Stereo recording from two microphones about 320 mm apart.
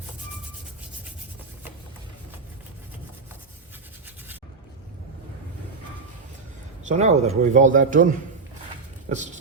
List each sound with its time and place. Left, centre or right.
6.8 s a man's voice: right